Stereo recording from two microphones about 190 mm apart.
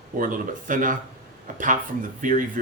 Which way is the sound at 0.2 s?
45° right (ahead or behind).